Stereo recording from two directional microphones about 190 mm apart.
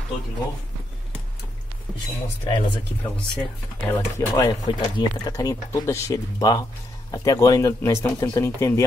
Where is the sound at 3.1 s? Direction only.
5° left (ahead or behind).